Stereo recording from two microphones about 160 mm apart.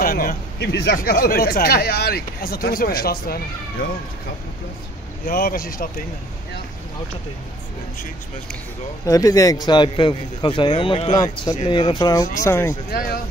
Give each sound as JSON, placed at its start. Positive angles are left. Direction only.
{"t": 0.0, "sound": "speech", "side_deg": 65}
{"t": 5.2, "sound": "speech", "side_deg": 60}
{"t": 9.0, "sound": "a man's voice", "side_deg": 20}
{"t": 12.9, "sound": "speech", "side_deg": 70}